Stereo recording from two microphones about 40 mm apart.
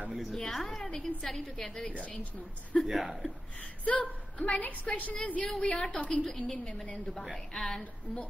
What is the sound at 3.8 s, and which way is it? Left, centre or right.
A woman's voice, left.